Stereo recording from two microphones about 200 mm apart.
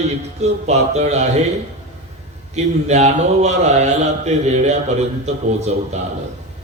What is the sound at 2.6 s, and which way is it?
A man's voice, 35° right (ahead or behind).